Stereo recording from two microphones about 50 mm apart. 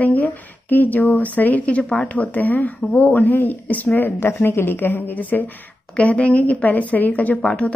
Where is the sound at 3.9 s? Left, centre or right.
Left.